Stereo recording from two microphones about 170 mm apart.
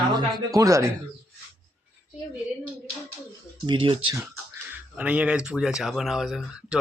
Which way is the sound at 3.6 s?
30° right (ahead or behind).